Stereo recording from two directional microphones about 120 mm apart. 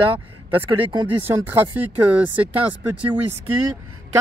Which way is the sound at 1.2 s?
20° right (ahead or behind).